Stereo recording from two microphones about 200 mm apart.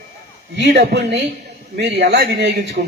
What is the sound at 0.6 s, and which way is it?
A man's voice, 60° right (ahead or behind).